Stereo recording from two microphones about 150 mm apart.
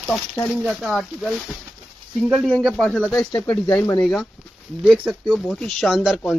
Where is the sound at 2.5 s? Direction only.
Centre (ahead or behind).